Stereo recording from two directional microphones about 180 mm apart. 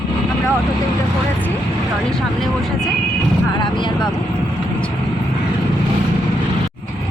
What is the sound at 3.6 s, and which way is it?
Speech, 25° left (ahead or behind).